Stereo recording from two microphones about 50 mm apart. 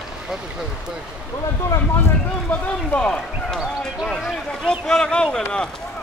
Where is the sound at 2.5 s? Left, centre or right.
Left.